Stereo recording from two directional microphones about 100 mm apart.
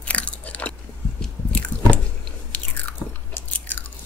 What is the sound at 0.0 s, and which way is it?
Biting, 15° left (ahead or behind).